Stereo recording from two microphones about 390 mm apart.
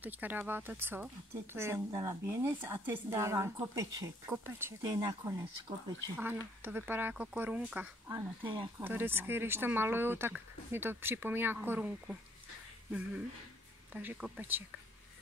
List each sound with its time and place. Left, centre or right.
0.0 s speech: centre
13.9 s speech: centre